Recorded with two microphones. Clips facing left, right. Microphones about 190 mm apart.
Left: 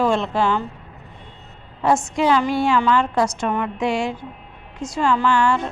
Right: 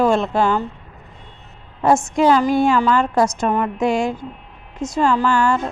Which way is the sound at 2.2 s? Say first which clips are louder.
Right 5 dB; 40° right (ahead or behind).